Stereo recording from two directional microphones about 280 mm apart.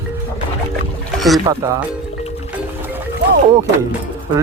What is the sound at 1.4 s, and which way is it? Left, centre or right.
Speech, centre.